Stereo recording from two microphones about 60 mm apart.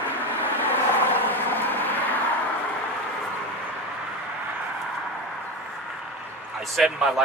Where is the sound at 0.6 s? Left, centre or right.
Left.